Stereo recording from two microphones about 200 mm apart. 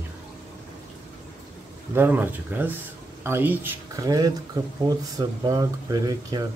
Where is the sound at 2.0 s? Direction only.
10° right (ahead or behind).